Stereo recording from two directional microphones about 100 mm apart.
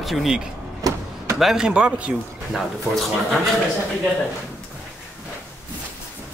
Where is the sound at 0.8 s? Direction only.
35° right (ahead or behind).